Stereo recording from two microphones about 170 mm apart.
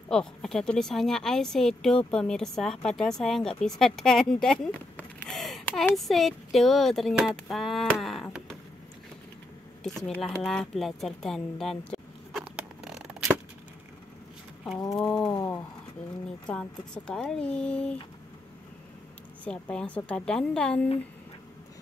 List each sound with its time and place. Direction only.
0.1 s a woman's voice: 5° left (ahead or behind)
9.8 s a sound: 5° left (ahead or behind)
15.0 s a woman's voice: 5° left (ahead or behind)
15.2 s speech: 20° left (ahead or behind)
16.4 s a woman's voice: 5° left (ahead or behind)
19.4 s a woman's voice: 5° left (ahead or behind)